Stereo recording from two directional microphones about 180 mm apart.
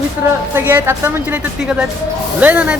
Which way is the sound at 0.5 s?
10° right (ahead or behind).